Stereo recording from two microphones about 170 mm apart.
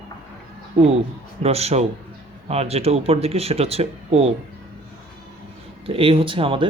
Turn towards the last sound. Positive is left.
turn(degrees=-30)  # may be behind; listen again after turning